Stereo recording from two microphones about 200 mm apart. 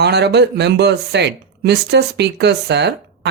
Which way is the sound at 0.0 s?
55° right (ahead or behind).